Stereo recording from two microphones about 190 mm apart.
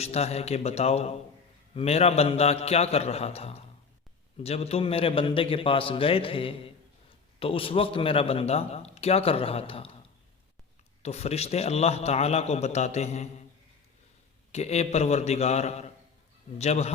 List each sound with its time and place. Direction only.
0.0 s a man's voice: 35° left (ahead or behind)
11.0 s a man's voice: 35° left (ahead or behind)
14.5 s a man's voice: 35° left (ahead or behind)